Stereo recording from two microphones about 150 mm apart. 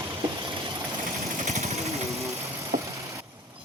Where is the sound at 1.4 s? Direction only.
45° right (ahead or behind).